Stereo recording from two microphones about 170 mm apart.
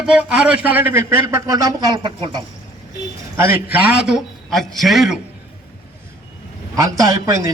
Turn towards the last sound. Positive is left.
turn(degrees=-20)  # may be behind; listen again after turning